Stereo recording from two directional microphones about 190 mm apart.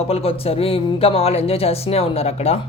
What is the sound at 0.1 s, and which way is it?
Speech, 30° left (ahead or behind).